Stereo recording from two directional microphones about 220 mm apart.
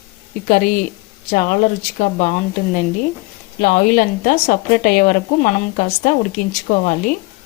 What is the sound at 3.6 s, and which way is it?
Speech, 40° left (ahead or behind).